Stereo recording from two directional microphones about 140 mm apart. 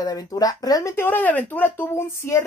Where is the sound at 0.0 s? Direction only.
25° left (ahead or behind).